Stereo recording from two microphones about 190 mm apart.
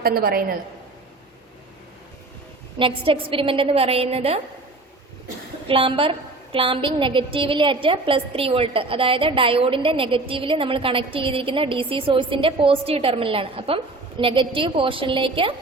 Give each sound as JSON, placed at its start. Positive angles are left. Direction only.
{"t": 0.0, "sound": "a woman's voice", "side_deg": -50}
{"t": 2.7, "sound": "a woman's voice", "side_deg": -25}
{"t": 5.6, "sound": "a woman's voice", "side_deg": -30}